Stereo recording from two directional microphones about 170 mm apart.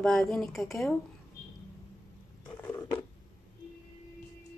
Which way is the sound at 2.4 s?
20° left (ahead or behind).